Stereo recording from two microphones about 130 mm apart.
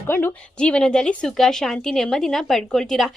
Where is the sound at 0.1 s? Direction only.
10° left (ahead or behind).